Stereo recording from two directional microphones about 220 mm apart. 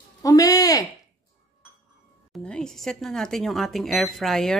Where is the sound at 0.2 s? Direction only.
15° left (ahead or behind).